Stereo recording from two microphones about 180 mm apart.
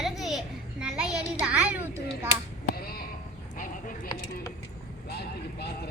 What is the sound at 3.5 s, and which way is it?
Clip-clop, 50° left (ahead or behind).